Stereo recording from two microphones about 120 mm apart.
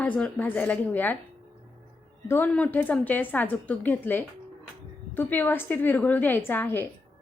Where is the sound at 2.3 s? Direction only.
15° left (ahead or behind).